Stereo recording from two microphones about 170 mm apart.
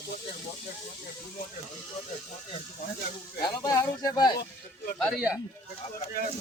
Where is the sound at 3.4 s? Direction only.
25° left (ahead or behind).